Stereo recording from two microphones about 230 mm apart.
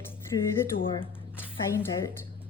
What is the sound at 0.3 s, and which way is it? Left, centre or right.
Speech, centre.